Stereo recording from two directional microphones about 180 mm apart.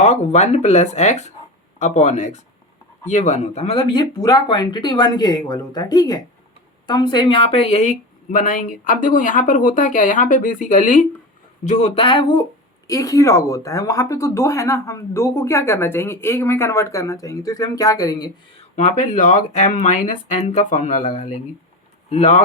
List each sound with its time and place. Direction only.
0.0 s speech: 40° left (ahead or behind); by 18.3 s 20° left (ahead or behind)
18.8 s speech: 40° left (ahead or behind)